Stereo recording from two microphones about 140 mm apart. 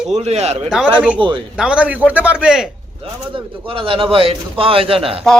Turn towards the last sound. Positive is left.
turn(degrees=-40)  # may be behind; listen again after turning